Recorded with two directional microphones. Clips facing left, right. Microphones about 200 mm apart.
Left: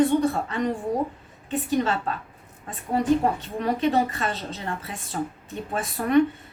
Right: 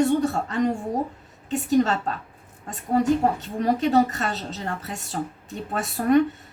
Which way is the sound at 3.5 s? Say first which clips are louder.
Right 4 dB; 40° right (ahead or behind).